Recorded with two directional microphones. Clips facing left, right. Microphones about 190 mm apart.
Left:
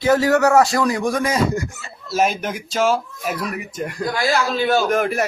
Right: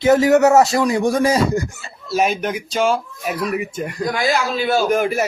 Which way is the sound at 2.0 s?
Centre (ahead or behind).